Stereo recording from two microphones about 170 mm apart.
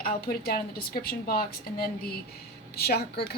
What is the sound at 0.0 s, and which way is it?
A woman's voice, 60° left (ahead or behind).